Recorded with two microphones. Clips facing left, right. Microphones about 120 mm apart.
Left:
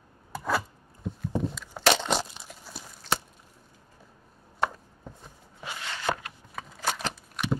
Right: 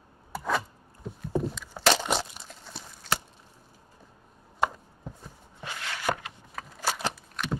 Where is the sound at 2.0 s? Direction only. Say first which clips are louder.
Left 1 dB; centre (ahead or behind).